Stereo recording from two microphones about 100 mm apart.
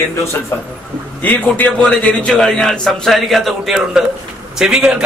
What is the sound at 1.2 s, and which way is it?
A man's voice, 20° left (ahead or behind).